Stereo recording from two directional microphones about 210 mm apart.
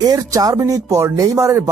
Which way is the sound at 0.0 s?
15° right (ahead or behind).